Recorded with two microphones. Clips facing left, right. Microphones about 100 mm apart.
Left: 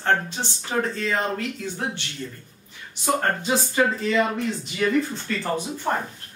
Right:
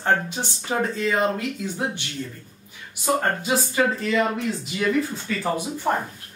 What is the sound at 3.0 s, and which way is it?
Speech, 5° right (ahead or behind).